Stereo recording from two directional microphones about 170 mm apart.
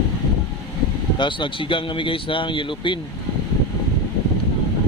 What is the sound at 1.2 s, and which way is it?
Speech, 30° left (ahead or behind).